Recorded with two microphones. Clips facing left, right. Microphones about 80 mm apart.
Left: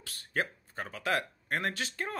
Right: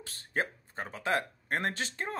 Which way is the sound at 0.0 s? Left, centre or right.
Right.